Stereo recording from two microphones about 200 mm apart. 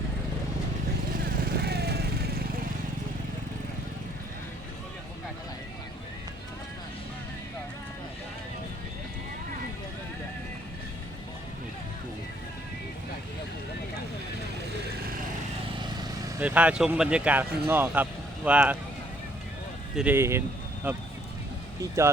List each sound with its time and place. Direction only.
1.5 s vehicle: 55° right (ahead or behind)
16.4 s speech: 5° right (ahead or behind)
20.0 s speech: 10° right (ahead or behind)